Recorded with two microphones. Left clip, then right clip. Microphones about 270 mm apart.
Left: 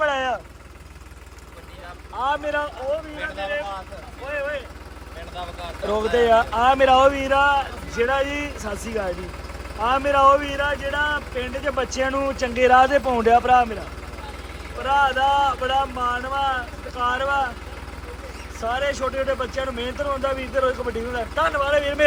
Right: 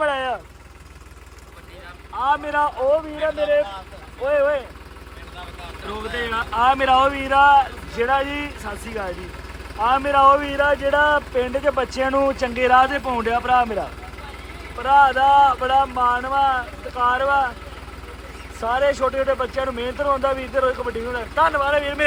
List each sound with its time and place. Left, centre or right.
0.0 s vehicle: centre
2.1 s speech: centre
4.3 s speech: centre
6.1 s speech: centre
14.8 s speech: centre
18.6 s speech: centre